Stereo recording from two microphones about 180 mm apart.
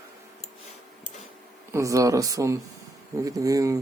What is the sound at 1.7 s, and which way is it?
Speech, 15° right (ahead or behind).